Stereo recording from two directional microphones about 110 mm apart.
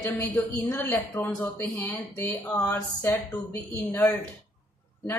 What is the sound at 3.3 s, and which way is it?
Speech, 20° left (ahead or behind).